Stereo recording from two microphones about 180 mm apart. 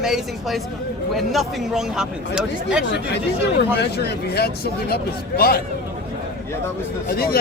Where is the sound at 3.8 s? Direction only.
65° left (ahead or behind).